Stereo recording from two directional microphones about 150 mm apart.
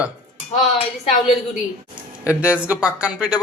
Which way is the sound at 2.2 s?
10° right (ahead or behind).